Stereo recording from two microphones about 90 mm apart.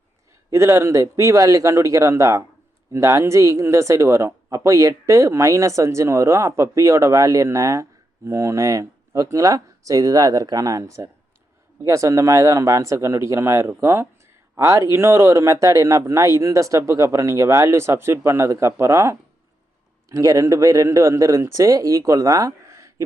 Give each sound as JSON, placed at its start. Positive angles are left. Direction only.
{"t": 0.5, "sound": "speech", "side_deg": -30}